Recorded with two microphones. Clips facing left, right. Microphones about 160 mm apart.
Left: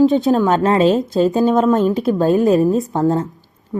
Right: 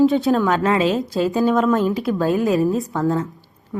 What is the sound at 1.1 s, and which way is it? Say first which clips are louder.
A woman's voice: left 4 dB; 20° left (ahead or behind).